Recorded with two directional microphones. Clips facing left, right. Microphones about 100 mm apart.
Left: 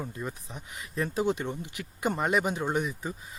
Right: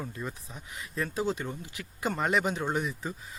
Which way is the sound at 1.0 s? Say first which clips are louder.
Left 3 dB; 25° left (ahead or behind).